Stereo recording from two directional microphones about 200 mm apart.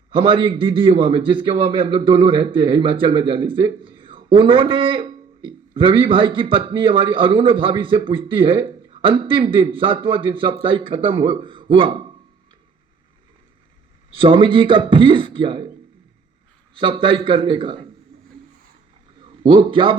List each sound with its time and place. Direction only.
0.1 s a man's voice: 25° right (ahead or behind)
14.1 s a man's voice: 25° right (ahead or behind)
16.7 s a man's voice: 25° right (ahead or behind)
19.5 s a man's voice: 25° right (ahead or behind)